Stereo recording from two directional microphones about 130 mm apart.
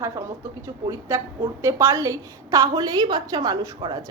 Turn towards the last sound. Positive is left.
turn(degrees=-30)  # may be behind; listen again after turning